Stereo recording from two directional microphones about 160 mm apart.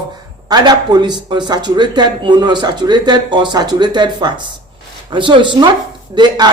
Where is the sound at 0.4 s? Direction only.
25° right (ahead or behind).